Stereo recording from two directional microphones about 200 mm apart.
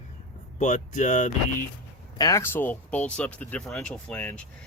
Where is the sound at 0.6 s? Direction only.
40° left (ahead or behind).